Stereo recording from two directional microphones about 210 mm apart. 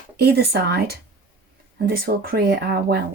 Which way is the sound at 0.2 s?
50° right (ahead or behind).